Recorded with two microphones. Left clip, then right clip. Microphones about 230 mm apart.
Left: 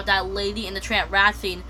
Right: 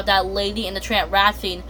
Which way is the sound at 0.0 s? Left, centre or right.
Centre.